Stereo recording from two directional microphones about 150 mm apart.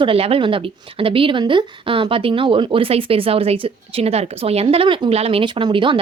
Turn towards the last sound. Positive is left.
turn(degrees=-35)  # may be behind; listen again after turning